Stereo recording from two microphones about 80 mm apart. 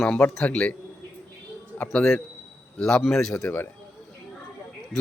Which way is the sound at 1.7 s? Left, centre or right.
Left.